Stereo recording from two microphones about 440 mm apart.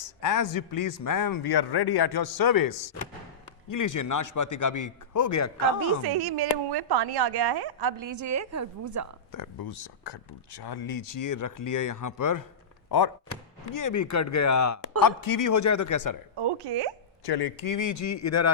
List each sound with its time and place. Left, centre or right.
0.0 s speech: left
6.1 s a woman's voice: right
9.3 s speech: left
13.7 s a man's voice: left
15.0 s speech: left
16.3 s speech: right
17.2 s a man's voice: left